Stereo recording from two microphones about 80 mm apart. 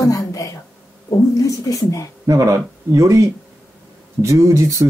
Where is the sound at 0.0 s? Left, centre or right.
Left.